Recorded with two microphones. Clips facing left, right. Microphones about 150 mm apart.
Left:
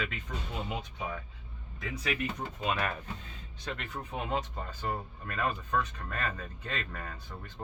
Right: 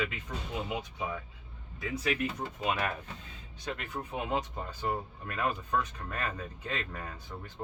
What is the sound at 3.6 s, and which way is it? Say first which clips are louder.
Speech: right 2 dB; 10° right (ahead or behind).